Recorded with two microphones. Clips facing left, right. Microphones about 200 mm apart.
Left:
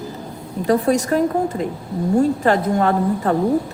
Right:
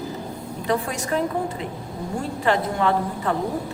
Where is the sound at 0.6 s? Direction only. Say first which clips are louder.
Left 8 dB; 40° left (ahead or behind).